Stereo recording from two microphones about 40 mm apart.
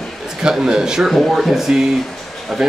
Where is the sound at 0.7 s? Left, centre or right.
Centre.